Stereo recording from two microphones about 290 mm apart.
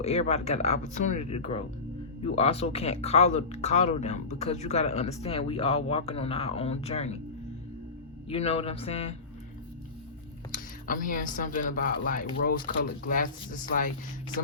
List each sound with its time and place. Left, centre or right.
0.0 s speech: left
8.3 s speech: left
10.5 s speech: left